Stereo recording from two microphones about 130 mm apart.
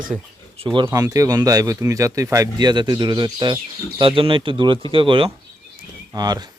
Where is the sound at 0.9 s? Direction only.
25° right (ahead or behind).